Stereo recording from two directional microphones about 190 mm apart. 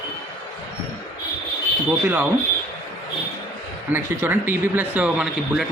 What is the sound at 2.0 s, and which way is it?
Speech, 10° right (ahead or behind).